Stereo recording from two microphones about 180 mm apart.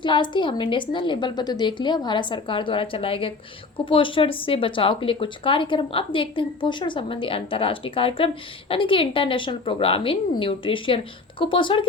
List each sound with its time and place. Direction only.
0.0 s speech: 25° left (ahead or behind)